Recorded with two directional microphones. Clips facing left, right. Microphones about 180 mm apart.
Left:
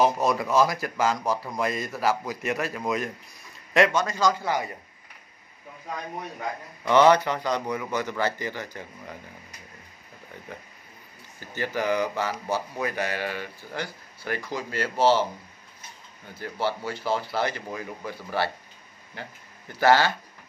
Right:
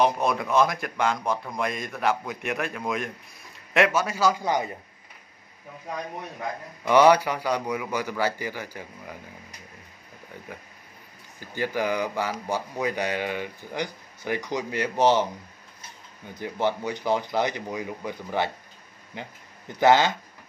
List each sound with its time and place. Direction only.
0.0 s a man's voice: centre (ahead or behind); by 4.6 s 15° right (ahead or behind)
6.8 s speech: 10° right (ahead or behind)
10.5 s speech: 10° right (ahead or behind)
16.3 s speech: 20° right (ahead or behind)